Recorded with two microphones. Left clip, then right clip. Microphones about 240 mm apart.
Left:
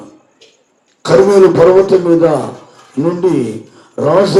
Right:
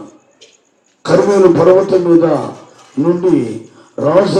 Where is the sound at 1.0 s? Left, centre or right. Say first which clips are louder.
Left 2 dB; left.